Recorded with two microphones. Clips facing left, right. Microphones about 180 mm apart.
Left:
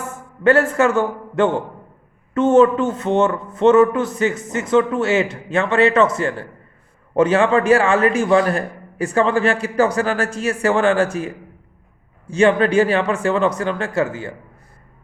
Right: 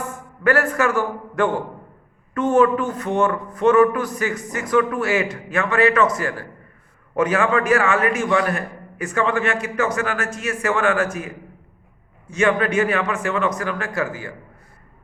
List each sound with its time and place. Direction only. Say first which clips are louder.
0.1 s a man's voice: left 5 dB; 25° left (ahead or behind)
12.3 s speech: left 4 dB; 30° left (ahead or behind)